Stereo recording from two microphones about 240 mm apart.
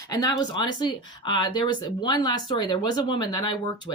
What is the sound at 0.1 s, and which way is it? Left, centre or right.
Speech, centre.